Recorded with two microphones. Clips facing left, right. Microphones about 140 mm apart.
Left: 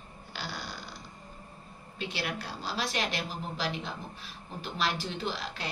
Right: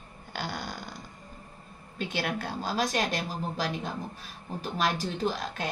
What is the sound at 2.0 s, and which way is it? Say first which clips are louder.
Speech: right 4 dB; 50° right (ahead or behind).